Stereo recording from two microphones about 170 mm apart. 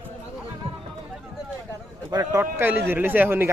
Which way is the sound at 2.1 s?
20° right (ahead or behind).